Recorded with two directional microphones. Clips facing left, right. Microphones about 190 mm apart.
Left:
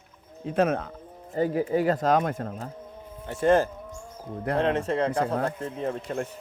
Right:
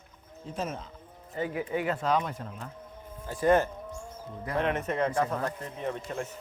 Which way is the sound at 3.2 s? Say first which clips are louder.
Left 3 dB; 25° left (ahead or behind).